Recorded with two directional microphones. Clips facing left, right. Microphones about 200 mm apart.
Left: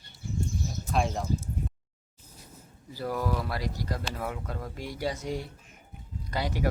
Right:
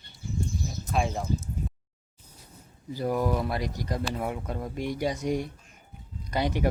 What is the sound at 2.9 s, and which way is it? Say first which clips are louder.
Speech: right 4 dB; 20° right (ahead or behind).